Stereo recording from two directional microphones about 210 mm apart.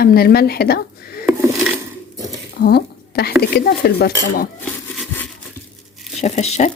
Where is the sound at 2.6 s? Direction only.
50° left (ahead or behind).